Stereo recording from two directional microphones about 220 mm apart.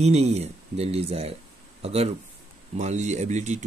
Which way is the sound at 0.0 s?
30° right (ahead or behind).